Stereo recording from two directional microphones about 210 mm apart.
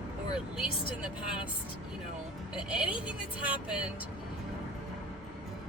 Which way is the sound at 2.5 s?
5° right (ahead or behind).